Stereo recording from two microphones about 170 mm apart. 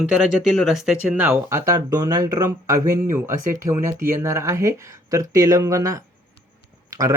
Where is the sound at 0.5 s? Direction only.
Centre (ahead or behind).